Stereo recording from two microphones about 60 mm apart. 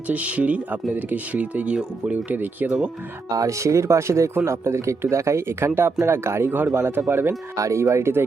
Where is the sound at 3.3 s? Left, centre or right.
Right.